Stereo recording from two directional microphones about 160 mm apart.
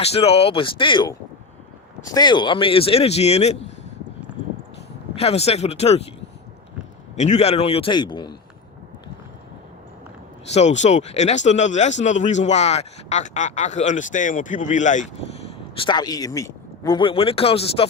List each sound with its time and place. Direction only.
0.0 s speech: 40° left (ahead or behind)
5.1 s speech: 40° left (ahead or behind)
7.2 s speech: 45° left (ahead or behind); by 8.4 s 25° left (ahead or behind)
10.5 s speech: 45° left (ahead or behind)
15.8 s speech: 25° left (ahead or behind)